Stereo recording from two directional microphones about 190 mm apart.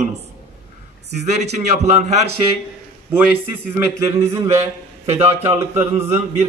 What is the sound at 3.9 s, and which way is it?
A man's voice, 15° right (ahead or behind).